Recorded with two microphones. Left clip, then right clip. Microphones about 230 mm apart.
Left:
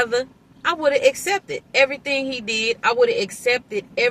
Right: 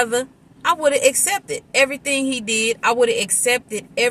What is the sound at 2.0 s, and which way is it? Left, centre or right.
Speech, centre.